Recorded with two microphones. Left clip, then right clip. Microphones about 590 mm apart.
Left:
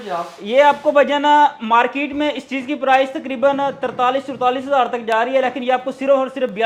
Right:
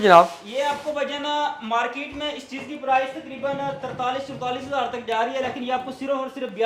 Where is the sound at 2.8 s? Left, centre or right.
Left.